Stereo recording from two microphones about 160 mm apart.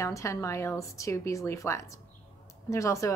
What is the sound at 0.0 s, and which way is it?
A woman's voice, 20° left (ahead or behind).